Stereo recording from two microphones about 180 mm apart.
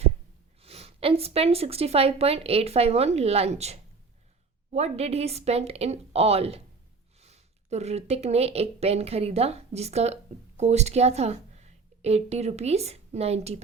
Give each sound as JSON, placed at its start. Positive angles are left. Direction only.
{"t": 0.6, "sound": "a woman's voice", "side_deg": -35}